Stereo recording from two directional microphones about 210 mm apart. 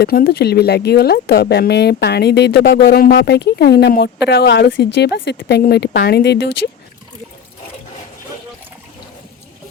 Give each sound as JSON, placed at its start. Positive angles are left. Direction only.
{"t": 0.0, "sound": "speech", "side_deg": 45}